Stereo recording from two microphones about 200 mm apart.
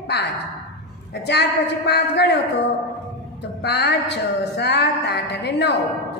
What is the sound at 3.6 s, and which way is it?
A woman's voice, 55° left (ahead or behind).